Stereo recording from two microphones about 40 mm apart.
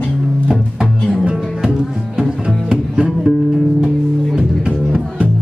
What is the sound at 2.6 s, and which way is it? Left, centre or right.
Music, right.